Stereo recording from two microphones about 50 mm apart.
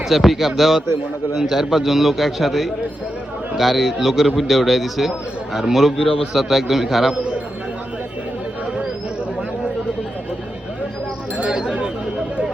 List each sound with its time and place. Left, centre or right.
0.1 s a man's voice: centre
11.4 s chatter: centre